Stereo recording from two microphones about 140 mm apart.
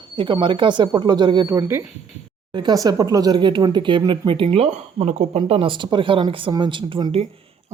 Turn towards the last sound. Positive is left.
turn(degrees=-40)  # may be behind; listen again after turning